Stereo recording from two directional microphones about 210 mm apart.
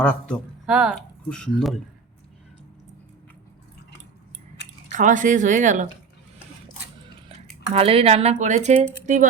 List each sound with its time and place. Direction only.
0.0 s speech: 5° left (ahead or behind)
4.9 s speech: 35° right (ahead or behind)
7.7 s speech: 30° right (ahead or behind)